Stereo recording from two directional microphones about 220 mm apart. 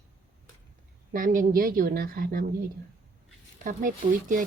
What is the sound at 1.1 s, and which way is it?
A woman's voice, 40° right (ahead or behind).